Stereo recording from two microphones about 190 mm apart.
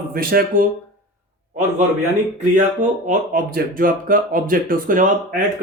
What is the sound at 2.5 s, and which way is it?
Speech, 40° right (ahead or behind).